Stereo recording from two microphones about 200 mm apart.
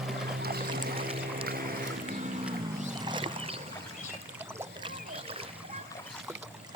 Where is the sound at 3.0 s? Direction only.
25° right (ahead or behind).